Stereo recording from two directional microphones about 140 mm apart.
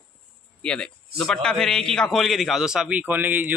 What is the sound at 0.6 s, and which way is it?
A man's voice, 5° left (ahead or behind).